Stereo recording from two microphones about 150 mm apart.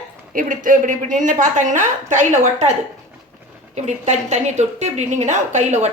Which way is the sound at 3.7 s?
50° right (ahead or behind).